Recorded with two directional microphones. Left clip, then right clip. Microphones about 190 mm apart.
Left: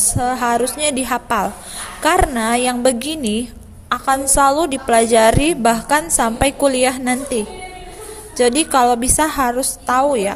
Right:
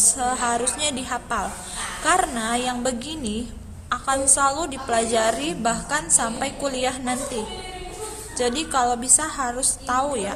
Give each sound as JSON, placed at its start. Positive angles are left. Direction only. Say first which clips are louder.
{"t": 0.2, "sound": "a woman's voice", "louder": "left 6 dB", "side_deg": 30}